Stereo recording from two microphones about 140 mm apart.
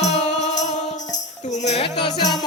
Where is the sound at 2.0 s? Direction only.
30° left (ahead or behind).